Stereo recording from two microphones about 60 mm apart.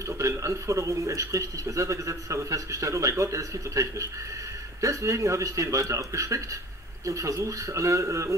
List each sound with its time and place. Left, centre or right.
0.0 s speech: right